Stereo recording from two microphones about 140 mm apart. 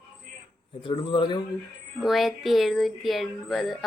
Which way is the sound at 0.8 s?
35° left (ahead or behind).